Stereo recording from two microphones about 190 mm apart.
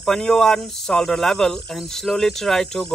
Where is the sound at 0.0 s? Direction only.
Centre (ahead or behind).